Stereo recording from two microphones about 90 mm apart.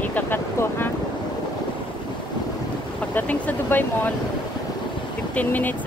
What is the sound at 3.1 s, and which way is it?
Speech, 20° left (ahead or behind).